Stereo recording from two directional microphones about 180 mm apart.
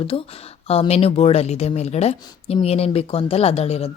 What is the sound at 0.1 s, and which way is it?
A woman's voice, 35° left (ahead or behind).